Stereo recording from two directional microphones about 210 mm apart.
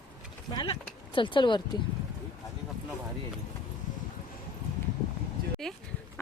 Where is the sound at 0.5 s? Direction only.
20° left (ahead or behind).